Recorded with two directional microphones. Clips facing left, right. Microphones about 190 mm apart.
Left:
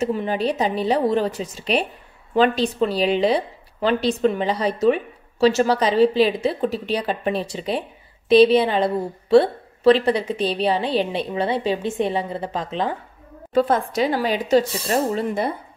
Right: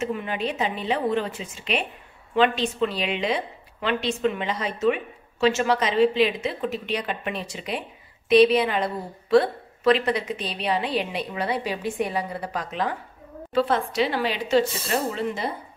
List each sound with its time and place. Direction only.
0.0 s a woman's voice: 35° left (ahead or behind)
13.5 s speech: 45° left (ahead or behind)